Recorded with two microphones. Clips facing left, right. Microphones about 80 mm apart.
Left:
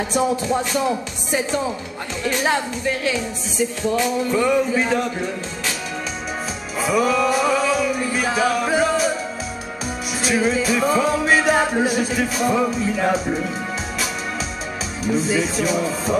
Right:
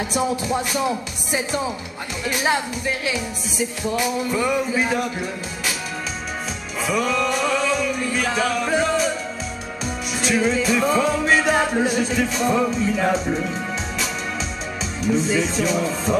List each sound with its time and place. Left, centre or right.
0.1 s speech: centre
6.8 s music: centre
10.2 s music: centre
15.0 s music: centre